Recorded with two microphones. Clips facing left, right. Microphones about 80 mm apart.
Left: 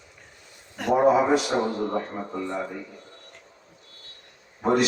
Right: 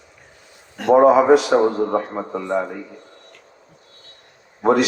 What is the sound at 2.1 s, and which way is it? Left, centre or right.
Speech, right.